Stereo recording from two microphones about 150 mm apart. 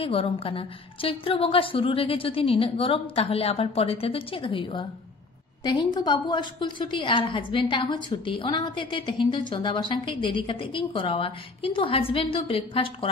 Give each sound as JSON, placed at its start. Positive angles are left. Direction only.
{"t": 0.0, "sound": "a woman's voice", "side_deg": 40}